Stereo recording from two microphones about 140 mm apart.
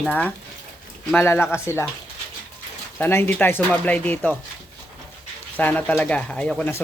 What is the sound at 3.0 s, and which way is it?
Speech, 15° left (ahead or behind).